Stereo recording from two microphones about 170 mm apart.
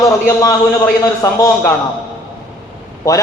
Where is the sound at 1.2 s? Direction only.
20° left (ahead or behind).